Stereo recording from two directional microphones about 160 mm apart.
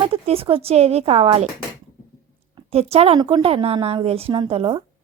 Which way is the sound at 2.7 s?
40° right (ahead or behind).